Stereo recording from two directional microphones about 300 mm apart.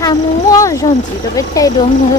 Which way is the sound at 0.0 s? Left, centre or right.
Centre.